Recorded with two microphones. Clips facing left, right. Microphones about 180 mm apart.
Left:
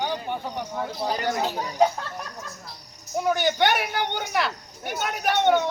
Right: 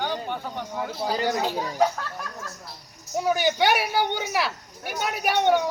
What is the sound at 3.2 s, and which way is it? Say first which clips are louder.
Speech: even; 5° right (ahead or behind).